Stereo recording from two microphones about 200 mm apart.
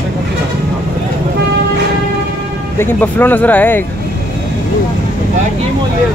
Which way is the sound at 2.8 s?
10° left (ahead or behind).